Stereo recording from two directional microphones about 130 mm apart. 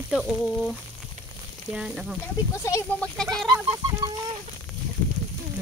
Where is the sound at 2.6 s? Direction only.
20° left (ahead or behind).